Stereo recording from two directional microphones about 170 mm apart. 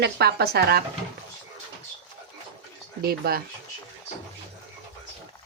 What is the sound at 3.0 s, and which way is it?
Speech, 65° right (ahead or behind).